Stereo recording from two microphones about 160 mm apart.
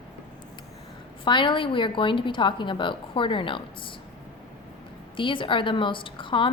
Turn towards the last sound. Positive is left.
turn(degrees=30)  # may be behind; listen again after turning